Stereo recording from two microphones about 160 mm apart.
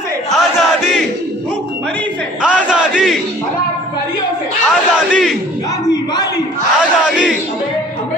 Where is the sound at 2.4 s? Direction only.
5° right (ahead or behind).